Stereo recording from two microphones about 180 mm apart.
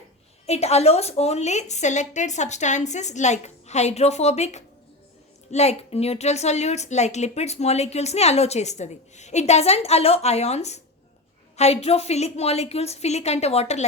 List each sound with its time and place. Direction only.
0.4 s a woman's voice: 35° left (ahead or behind)